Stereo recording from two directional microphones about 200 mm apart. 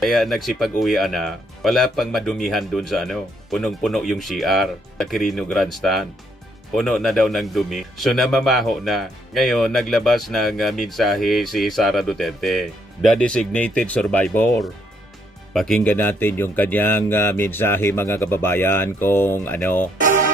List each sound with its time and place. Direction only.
0.0 s speech: centre (ahead or behind)
20.0 s music: 40° right (ahead or behind)